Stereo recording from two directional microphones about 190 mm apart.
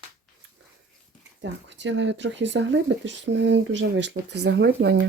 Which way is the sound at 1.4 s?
70° right (ahead or behind).